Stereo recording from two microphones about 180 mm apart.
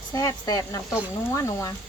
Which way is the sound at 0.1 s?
20° left (ahead or behind).